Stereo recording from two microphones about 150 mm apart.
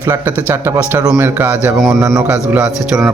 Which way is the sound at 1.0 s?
25° right (ahead or behind).